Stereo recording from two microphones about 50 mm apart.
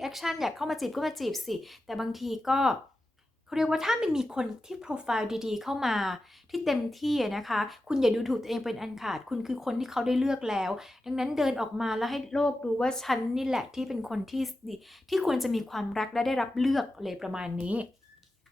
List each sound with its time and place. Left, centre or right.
0.0 s a woman's voice: centre
12.3 s speech: centre
13.3 s a woman's voice: centre